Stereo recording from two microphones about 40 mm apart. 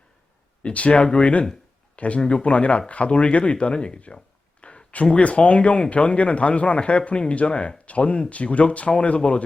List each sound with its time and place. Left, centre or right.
0.6 s speech: left
4.6 s a sound: left
5.1 s speech: left